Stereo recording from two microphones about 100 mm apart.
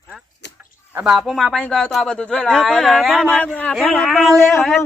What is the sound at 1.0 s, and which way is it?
Speech, centre (ahead or behind).